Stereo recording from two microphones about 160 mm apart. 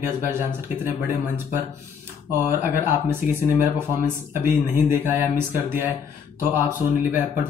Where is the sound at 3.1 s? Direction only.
15° right (ahead or behind).